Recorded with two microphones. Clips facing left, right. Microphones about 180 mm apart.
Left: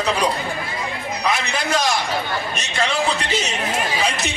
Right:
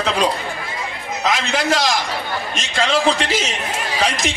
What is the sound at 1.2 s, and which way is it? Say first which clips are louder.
A man's voice: right 4 dB; 90° right.